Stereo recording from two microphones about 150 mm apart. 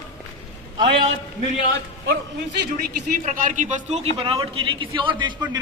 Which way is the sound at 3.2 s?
55° right (ahead or behind).